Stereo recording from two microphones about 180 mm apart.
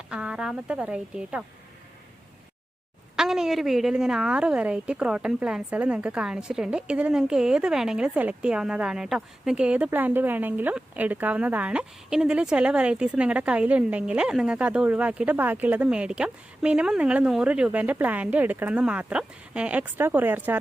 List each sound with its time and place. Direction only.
0.1 s a woman's voice: 5° right (ahead or behind)
3.2 s a woman's voice: 5° right (ahead or behind)